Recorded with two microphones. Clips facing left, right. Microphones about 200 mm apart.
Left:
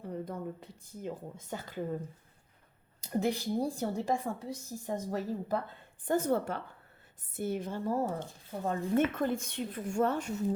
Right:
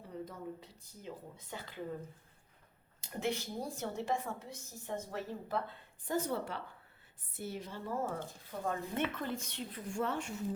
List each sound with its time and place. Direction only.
0.0 s speech: 55° left (ahead or behind)
3.0 s a woman's voice: 40° left (ahead or behind)
6.1 s a woman's voice: 50° left (ahead or behind)
8.5 s a woman's voice: 30° left (ahead or behind)
9.0 s a woman's voice: 50° left (ahead or behind)